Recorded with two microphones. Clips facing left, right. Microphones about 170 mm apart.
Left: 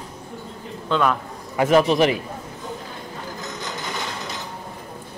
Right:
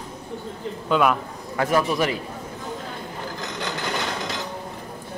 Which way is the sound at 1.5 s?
20° left (ahead or behind).